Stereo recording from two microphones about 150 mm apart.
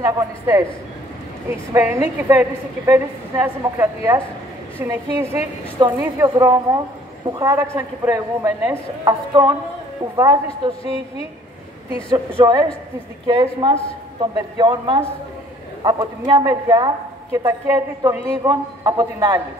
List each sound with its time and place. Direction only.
0.0 s a woman's voice: 20° right (ahead or behind)
6.4 s a woman's voice: 25° right (ahead or behind)
7.7 s a woman's voice: 15° right (ahead or behind)
12.1 s a woman's voice: 30° right (ahead or behind)